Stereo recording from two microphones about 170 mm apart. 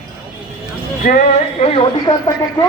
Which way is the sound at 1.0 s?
50° left (ahead or behind).